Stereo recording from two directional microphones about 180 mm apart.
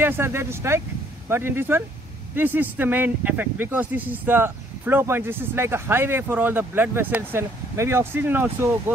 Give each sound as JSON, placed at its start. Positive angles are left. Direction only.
{"t": 0.0, "sound": "speech", "side_deg": -10}